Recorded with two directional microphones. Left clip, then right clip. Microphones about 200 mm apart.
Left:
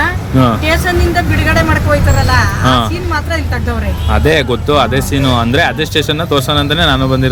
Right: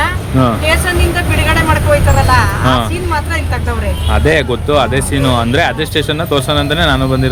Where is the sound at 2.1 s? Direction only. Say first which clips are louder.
Right 2 dB; 5° right (ahead or behind).